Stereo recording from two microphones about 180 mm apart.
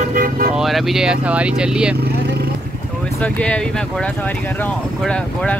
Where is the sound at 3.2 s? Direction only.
5° left (ahead or behind).